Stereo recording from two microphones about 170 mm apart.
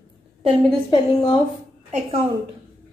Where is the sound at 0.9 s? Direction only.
25° left (ahead or behind).